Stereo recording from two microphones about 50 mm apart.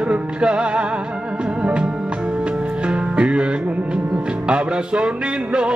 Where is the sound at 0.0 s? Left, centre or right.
Right.